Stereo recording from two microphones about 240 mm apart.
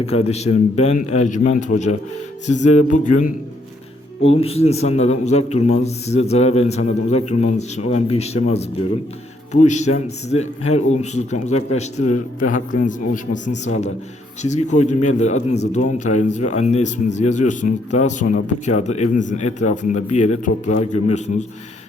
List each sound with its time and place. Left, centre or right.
0.0 s a man's voice: left
4.4 s a man's voice: left